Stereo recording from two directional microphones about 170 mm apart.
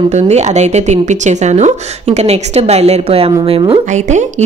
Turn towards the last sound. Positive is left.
turn(degrees=-45)  # may be behind; listen again after turning